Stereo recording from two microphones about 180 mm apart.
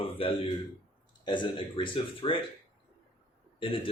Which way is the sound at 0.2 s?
30° left (ahead or behind).